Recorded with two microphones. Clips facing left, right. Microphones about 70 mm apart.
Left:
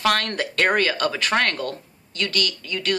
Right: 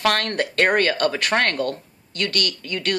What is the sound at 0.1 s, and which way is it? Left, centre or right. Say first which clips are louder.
A woman's voice: right 1 dB; right.